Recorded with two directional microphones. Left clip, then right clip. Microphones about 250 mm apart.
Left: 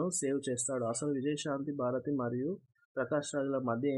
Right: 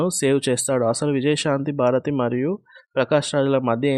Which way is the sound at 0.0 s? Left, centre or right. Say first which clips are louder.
Right 14 dB; right.